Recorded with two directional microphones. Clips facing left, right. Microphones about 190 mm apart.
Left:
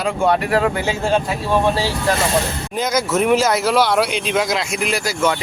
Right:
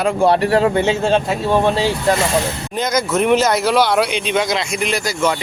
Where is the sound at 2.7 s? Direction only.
5° left (ahead or behind).